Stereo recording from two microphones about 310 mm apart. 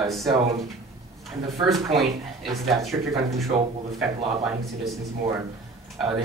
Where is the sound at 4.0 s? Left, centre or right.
Centre.